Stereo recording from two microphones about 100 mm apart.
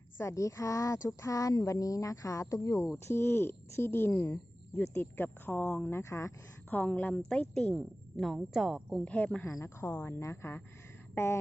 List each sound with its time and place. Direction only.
0.2 s a woman's voice: 30° left (ahead or behind)
6.7 s a woman's voice: 15° left (ahead or behind); by 8.8 s 5° right (ahead or behind)
9.0 s a woman's voice: 15° left (ahead or behind)